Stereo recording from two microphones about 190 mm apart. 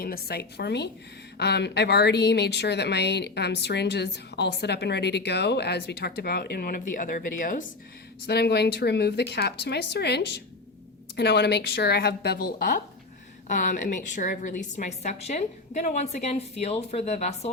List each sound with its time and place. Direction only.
0.0 s a woman's voice: 50° left (ahead or behind)
8.3 s a woman's voice: 60° left (ahead or behind); by 17.5 s 35° left (ahead or behind)